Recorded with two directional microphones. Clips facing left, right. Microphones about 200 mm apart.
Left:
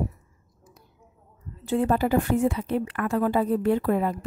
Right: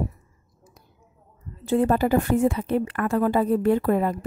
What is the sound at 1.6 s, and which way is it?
A woman's voice, 45° right (ahead or behind).